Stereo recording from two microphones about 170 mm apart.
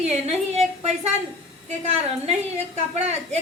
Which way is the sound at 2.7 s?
40° right (ahead or behind).